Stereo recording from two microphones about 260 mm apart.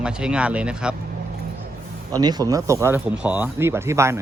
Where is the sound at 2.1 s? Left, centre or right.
Centre.